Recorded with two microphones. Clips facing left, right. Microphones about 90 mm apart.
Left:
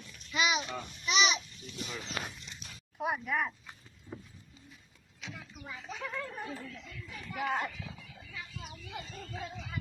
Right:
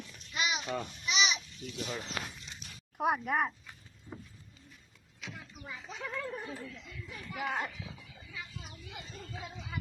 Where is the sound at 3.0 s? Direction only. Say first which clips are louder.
Right 3 dB; 50° right (ahead or behind).